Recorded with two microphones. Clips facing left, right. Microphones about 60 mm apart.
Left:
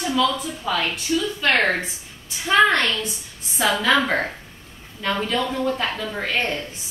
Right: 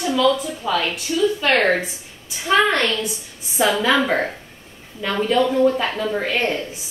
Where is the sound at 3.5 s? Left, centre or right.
Centre.